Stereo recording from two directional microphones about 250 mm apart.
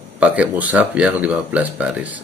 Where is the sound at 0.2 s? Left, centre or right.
Centre.